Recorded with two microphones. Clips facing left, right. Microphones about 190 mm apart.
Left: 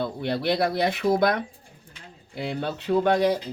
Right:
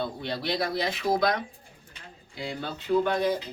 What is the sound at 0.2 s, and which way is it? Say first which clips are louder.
Speech: left 6 dB; 60° left (ahead or behind).